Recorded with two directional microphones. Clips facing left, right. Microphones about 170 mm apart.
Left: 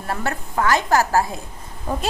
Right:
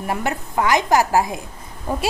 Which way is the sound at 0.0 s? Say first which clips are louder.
Right 2 dB; 15° right (ahead or behind).